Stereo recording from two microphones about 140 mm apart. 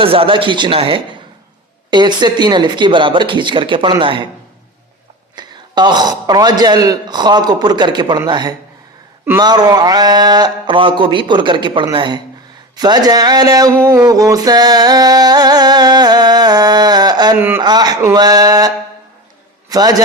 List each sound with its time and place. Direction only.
0.0 s a man's voice: 40° right (ahead or behind)
5.4 s a man's voice: 30° right (ahead or behind)
12.7 s a sound: 30° right (ahead or behind)
17.3 s a man's voice: 15° right (ahead or behind)
17.6 s a man's voice: 30° right (ahead or behind)
19.7 s a man's voice: 25° right (ahead or behind)